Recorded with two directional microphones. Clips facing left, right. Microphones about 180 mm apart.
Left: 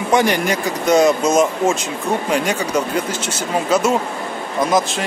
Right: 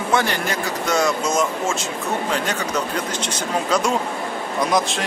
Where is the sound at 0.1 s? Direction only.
15° left (ahead or behind).